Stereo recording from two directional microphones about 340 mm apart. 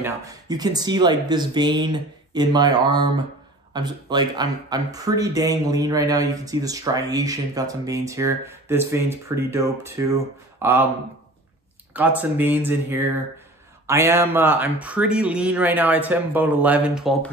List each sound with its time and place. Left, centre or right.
0.0 s speech: centre
12.2 s speech: centre